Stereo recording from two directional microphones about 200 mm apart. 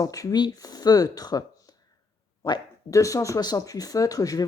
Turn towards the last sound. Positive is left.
turn(degrees=15)  # may be behind; listen again after turning